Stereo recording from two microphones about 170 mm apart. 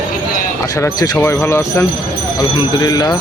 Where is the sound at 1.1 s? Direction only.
10° left (ahead or behind).